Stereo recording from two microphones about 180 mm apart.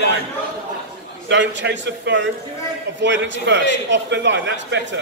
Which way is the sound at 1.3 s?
90° right.